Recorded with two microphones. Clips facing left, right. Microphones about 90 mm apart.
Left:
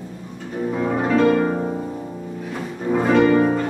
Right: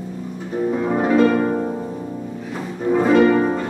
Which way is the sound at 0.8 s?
10° right (ahead or behind).